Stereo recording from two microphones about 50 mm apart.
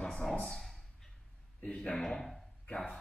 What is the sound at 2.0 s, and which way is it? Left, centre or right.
Speech, centre.